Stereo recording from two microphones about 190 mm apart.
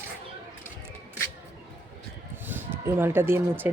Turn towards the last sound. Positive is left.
turn(degrees=-10)  # may be behind; listen again after turning